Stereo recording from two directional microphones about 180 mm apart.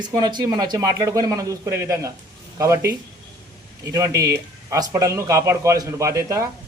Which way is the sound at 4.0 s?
20° right (ahead or behind).